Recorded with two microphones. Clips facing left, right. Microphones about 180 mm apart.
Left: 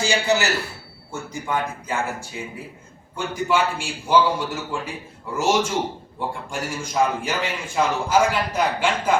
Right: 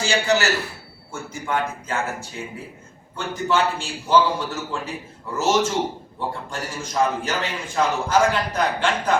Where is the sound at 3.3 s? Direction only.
10° left (ahead or behind).